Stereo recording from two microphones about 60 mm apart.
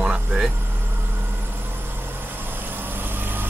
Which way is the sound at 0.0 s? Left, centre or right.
Centre.